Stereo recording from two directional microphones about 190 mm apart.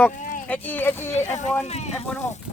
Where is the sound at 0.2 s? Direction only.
45° left (ahead or behind).